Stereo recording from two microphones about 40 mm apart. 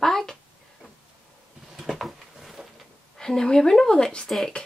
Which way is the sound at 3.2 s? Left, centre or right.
Centre.